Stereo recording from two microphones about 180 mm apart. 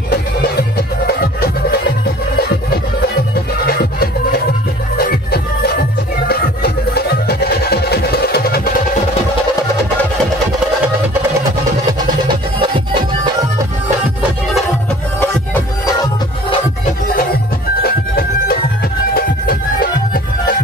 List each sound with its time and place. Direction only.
0.1 s music: 60° left (ahead or behind)
3.6 s music: 60° left (ahead or behind)
12.5 s music: 30° right (ahead or behind)
17.8 s music: 60° left (ahead or behind)